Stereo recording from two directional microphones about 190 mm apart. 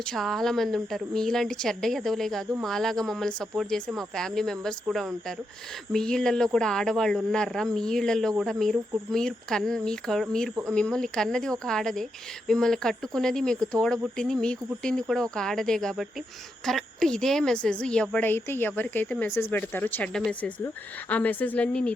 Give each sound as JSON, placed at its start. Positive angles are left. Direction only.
{"t": 0.0, "sound": "a woman's voice", "side_deg": 5}